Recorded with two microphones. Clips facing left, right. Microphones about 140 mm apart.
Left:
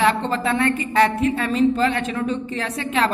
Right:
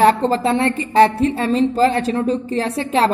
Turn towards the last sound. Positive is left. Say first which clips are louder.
# right 5 dB
turn(degrees=-30)  # may be behind; listen again after turning